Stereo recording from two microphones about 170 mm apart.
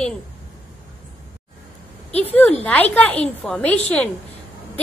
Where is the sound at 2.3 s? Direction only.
10° left (ahead or behind).